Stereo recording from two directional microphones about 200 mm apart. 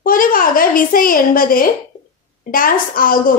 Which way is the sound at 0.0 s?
45° left (ahead or behind).